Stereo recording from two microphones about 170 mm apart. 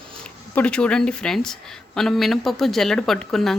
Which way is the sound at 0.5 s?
5° left (ahead or behind).